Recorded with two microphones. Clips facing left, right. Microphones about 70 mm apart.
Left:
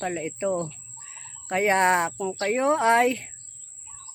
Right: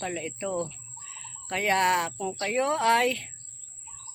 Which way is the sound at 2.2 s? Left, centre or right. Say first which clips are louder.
Left 3 dB; centre.